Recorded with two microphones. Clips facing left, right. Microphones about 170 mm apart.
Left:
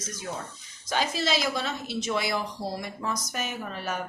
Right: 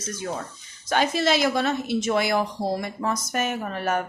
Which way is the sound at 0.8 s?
60° right (ahead or behind).